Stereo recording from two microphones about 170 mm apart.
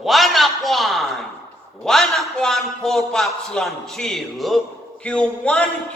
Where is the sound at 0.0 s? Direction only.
Centre (ahead or behind).